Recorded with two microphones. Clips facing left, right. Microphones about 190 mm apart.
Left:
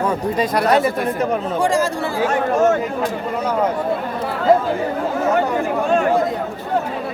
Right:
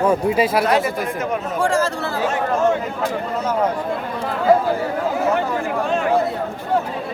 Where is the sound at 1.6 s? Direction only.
15° left (ahead or behind).